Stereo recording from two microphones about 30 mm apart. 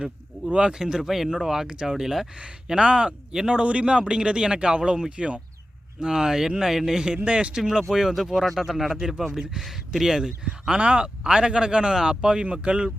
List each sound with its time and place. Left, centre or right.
0.7 s speech: centre
1.6 s speech: right
1.9 s speech: centre
2.7 s a man's voice: right; by 7.0 s centre
7.3 s a man's voice: right
7.5 s speech: centre
7.9 s speech: centre
8.9 s speech: centre
10.8 s speech: right
11.0 s speech: right
12.5 s a man's voice: right